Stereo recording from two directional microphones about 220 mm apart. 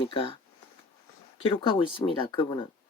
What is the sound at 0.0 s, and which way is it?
Speech, 20° left (ahead or behind).